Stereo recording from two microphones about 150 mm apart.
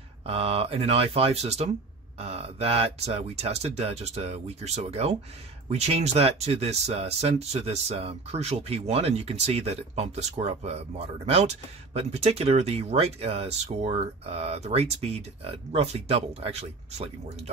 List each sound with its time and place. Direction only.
0.3 s speech: 40° right (ahead or behind)